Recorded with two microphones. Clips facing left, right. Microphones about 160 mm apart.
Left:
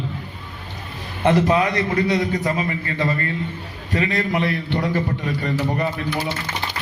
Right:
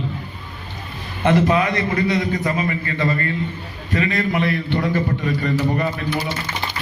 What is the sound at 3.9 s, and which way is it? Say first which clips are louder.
A man's voice: right 1 dB; 30° left (ahead or behind).